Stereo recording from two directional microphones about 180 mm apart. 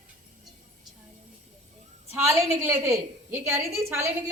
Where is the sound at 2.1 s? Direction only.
15° right (ahead or behind).